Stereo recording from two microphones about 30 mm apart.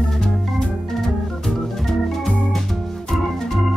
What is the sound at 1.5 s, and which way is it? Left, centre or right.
Organ, centre.